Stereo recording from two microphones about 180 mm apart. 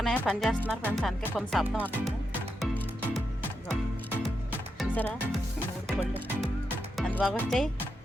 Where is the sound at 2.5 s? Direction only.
Centre (ahead or behind).